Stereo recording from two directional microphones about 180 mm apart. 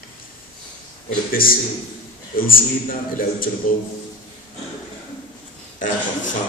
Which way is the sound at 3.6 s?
50° left (ahead or behind).